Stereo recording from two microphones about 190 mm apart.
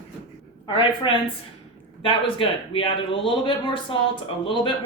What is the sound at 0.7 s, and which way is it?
Speech, 25° left (ahead or behind).